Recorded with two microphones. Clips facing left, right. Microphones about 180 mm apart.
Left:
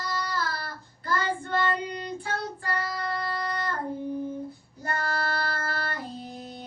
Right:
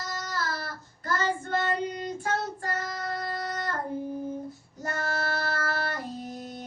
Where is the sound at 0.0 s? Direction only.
45° right (ahead or behind).